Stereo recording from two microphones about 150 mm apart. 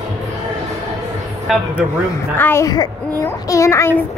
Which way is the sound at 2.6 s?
30° left (ahead or behind).